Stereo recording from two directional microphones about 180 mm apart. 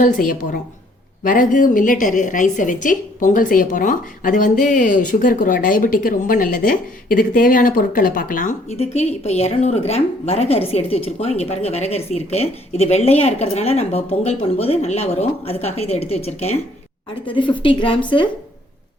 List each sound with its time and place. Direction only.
0.0 s a woman's voice: 45° left (ahead or behind)
8.7 s a woman's voice: 35° left (ahead or behind)